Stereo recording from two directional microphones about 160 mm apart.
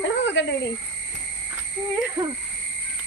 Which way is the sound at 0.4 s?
90° left.